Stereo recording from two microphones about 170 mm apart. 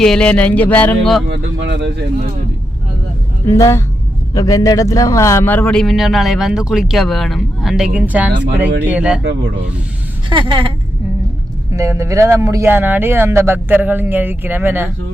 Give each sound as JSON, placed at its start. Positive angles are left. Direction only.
{"t": 0.0, "sound": "speech", "side_deg": 5}
{"t": 1.3, "sound": "speech", "side_deg": -90}
{"t": 3.4, "sound": "a man's voice", "side_deg": 15}
{"t": 10.2, "sound": "speech", "side_deg": -30}
{"t": 11.7, "sound": "speech", "side_deg": -20}